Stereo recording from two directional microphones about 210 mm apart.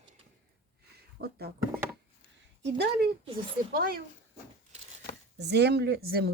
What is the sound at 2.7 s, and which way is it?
Speech, 55° right (ahead or behind).